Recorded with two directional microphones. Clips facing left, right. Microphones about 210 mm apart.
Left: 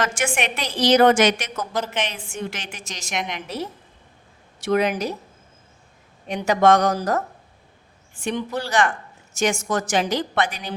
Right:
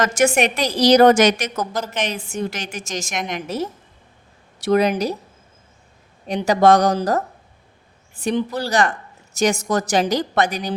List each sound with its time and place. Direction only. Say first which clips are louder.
0.0 s a woman's voice: right 7 dB; 40° right (ahead or behind)
6.2 s a woman's voice: right 3 dB; 35° right (ahead or behind)